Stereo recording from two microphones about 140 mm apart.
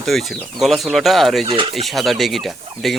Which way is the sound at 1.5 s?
40° right (ahead or behind).